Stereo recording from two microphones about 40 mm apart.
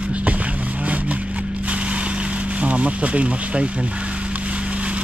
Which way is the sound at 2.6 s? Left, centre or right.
Right.